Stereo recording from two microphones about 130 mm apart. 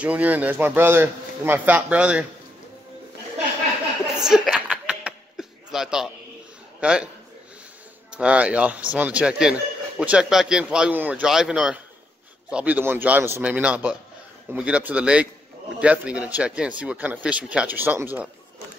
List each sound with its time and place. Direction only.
0.0 s speech: 10° right (ahead or behind)
4.2 s a sound: 5° right (ahead or behind)
6.8 s a man's voice: 5° right (ahead or behind)
8.1 s speech: 10° right (ahead or behind)